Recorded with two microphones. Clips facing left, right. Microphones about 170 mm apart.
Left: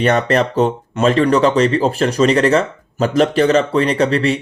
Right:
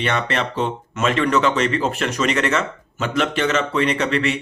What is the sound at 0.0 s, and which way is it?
A man's voice, 40° left (ahead or behind).